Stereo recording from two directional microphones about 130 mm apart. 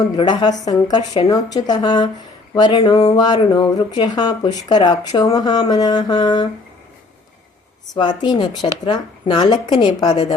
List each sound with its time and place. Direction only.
0.2 s speech: 35° left (ahead or behind)
7.9 s speech: 35° left (ahead or behind)